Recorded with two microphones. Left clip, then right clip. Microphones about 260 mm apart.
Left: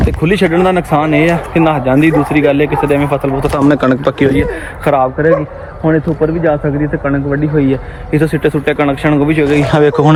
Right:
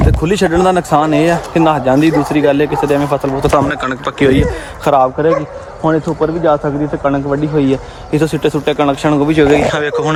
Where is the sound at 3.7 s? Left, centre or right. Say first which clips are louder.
Left 6 dB; centre.